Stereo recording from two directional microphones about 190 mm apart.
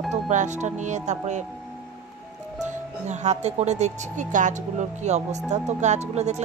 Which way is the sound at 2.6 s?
40° right (ahead or behind).